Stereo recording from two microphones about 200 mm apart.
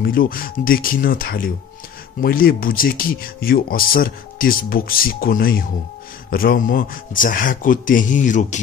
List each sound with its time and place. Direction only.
0.0 s speech: 45° left (ahead or behind)